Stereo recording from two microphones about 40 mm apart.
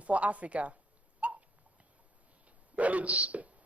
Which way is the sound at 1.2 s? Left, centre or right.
Right.